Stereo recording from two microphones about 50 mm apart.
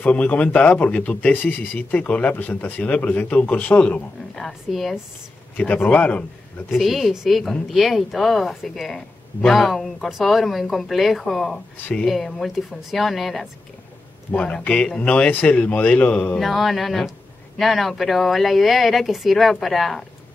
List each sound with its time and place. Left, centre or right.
0.0 s a man's voice: left
4.6 s speech: centre
5.6 s a man's voice: left
6.7 s speech: centre
14.7 s a man's voice: left
16.3 s speech: centre